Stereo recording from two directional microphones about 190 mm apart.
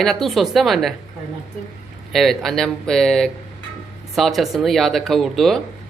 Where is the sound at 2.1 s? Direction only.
Centre (ahead or behind).